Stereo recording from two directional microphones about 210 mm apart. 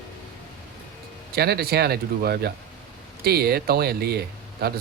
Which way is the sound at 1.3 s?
50° right (ahead or behind).